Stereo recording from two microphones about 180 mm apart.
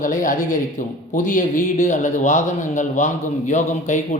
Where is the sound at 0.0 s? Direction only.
45° left (ahead or behind).